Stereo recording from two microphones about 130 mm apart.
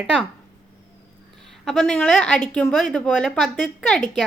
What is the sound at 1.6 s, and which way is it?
A woman's voice, 5° left (ahead or behind).